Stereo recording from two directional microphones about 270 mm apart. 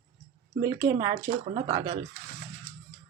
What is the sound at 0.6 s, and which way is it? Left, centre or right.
Speech, centre.